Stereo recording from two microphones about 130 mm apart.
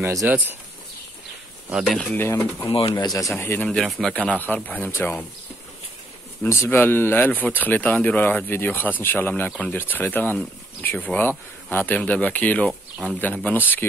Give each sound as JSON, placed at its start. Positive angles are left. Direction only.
{"t": 0.2, "sound": "speech", "side_deg": -15}
{"t": 1.7, "sound": "speech", "side_deg": -5}
{"t": 2.1, "sound": "speech", "side_deg": 20}
{"t": 2.9, "sound": "speech", "side_deg": 30}
{"t": 3.3, "sound": "speech", "side_deg": 15}
{"t": 3.7, "sound": "speech", "side_deg": 5}
{"t": 6.4, "sound": "speech", "side_deg": 20}
{"t": 12.9, "sound": "speech", "side_deg": -5}
{"t": 13.2, "sound": "speech", "side_deg": 10}